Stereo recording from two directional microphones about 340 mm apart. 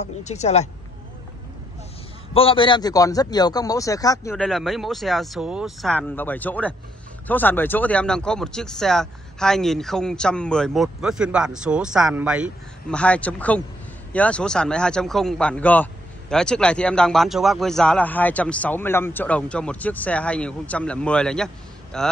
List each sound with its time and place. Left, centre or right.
0.2 s speech: centre
2.3 s a man's voice: centre